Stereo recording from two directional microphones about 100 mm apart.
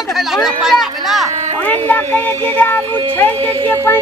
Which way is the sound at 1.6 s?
20° left (ahead or behind).